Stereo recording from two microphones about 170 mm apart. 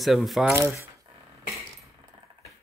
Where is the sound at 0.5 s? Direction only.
15° right (ahead or behind).